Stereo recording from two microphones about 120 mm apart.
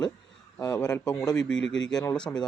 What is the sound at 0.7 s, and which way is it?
Speech, 10° left (ahead or behind).